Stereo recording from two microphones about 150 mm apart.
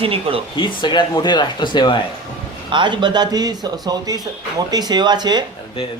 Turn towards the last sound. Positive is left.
turn(degrees=-30)  # may be behind; listen again after turning